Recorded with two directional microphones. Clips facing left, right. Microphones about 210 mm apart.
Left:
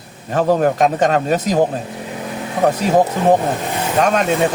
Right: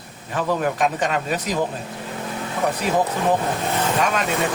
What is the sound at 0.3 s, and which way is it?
Speech, 45° left (ahead or behind).